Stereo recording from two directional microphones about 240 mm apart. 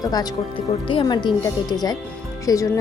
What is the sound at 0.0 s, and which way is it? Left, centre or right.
A woman's voice, centre.